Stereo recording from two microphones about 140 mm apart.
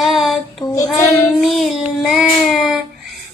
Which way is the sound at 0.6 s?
25° left (ahead or behind).